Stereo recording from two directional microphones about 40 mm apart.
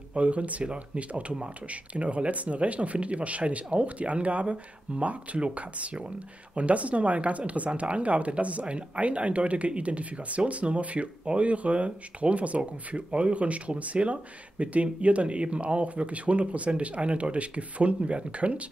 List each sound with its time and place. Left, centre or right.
0.1 s speech: right